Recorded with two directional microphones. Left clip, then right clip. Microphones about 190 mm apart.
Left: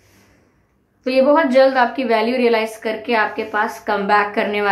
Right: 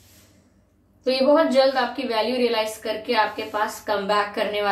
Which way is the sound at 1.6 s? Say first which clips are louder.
Left 6 dB; 45° left (ahead or behind).